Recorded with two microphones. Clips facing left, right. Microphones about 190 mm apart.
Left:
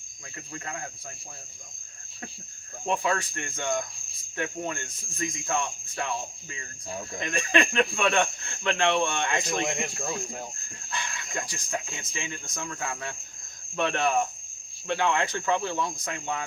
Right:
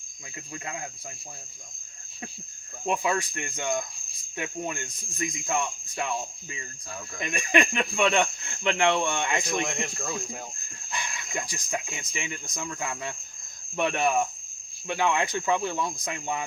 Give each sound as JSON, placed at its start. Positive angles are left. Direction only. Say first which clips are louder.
{"t": 2.8, "sound": "speech", "louder": "right 1 dB", "side_deg": -15}
{"t": 7.2, "sound": "speech", "louder": "right 1 dB", "side_deg": -15}
{"t": 9.6, "sound": "speech", "louder": "left 1 dB", "side_deg": 5}
{"t": 10.9, "sound": "speech", "louder": "even", "side_deg": -15}